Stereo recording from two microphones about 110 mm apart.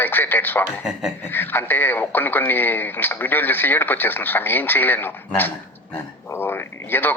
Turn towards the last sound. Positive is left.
turn(degrees=20)  # may be behind; listen again after turning